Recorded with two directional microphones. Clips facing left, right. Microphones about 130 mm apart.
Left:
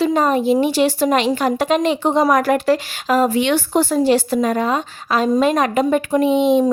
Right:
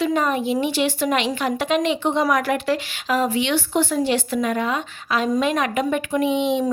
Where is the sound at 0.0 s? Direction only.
35° left (ahead or behind).